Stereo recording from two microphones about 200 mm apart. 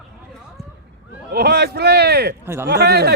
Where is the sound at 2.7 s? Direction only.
55° right (ahead or behind).